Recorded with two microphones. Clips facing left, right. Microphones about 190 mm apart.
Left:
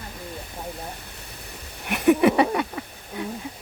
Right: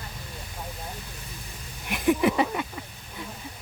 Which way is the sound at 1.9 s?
65° left (ahead or behind).